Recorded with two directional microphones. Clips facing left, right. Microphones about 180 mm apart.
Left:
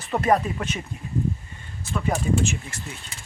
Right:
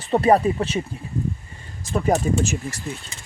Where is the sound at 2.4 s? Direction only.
40° right (ahead or behind).